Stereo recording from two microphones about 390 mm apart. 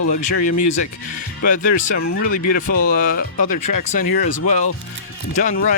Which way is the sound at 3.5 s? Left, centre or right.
Left.